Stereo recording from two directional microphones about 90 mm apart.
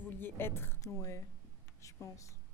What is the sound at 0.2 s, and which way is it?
Speech, 25° left (ahead or behind).